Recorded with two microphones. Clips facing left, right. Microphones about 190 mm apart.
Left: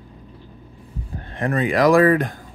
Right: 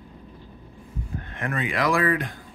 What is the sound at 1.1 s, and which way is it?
Speech, 35° left (ahead or behind).